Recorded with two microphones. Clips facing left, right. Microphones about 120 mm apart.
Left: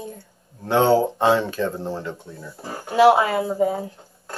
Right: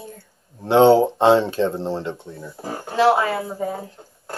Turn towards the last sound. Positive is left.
turn(degrees=20)  # may be behind; listen again after turning